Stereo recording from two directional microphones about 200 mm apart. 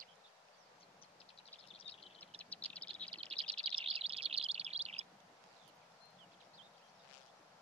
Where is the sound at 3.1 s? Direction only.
30° right (ahead or behind).